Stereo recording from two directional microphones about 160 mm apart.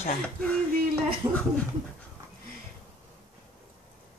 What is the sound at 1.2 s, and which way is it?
Speech, 25° right (ahead or behind).